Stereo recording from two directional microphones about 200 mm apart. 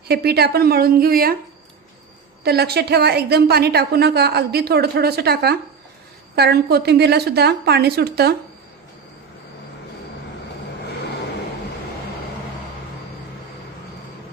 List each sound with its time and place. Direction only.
0.1 s a woman's voice: 50° right (ahead or behind)
2.4 s a woman's voice: 55° right (ahead or behind)